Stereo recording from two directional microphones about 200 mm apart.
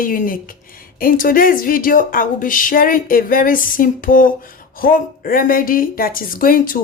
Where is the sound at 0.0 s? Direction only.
45° left (ahead or behind).